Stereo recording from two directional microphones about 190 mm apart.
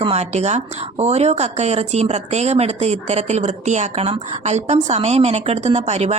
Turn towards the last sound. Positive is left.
turn(degrees=-35)  # may be behind; listen again after turning